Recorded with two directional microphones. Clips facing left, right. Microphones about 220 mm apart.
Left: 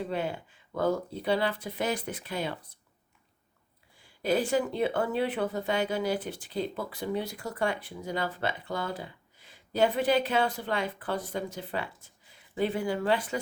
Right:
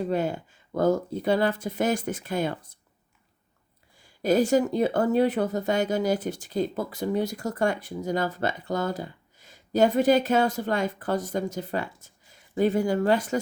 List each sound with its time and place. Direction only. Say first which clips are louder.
0.0 s speech: right 6 dB; 45° right (ahead or behind)
3.9 s speech: right 5 dB; 45° right (ahead or behind)